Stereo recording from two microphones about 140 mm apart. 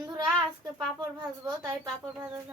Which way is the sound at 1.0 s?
30° right (ahead or behind).